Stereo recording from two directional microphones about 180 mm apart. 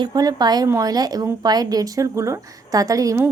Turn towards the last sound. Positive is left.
turn(degrees=-15)  # may be behind; listen again after turning